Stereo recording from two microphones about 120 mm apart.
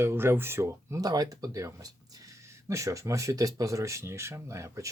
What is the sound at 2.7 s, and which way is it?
Speech, 25° right (ahead or behind).